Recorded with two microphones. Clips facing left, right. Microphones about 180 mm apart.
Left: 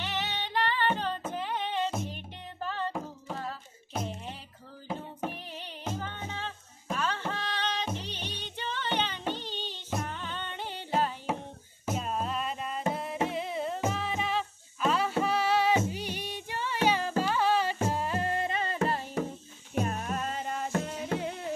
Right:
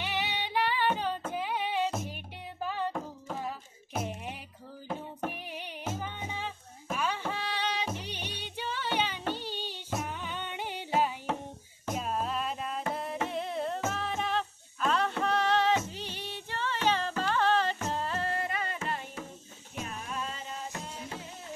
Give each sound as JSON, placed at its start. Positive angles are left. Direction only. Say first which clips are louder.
{"t": 0.0, "sound": "music", "louder": "right 1 dB", "side_deg": -10}
{"t": 9.3, "sound": "a sound", "louder": "even", "side_deg": -10}
{"t": 10.0, "sound": "music", "louder": "even", "side_deg": -10}
{"t": 11.8, "sound": "music", "louder": "left 1 dB", "side_deg": 0}
{"t": 19.7, "sound": "music", "louder": "left 7 dB", "side_deg": 55}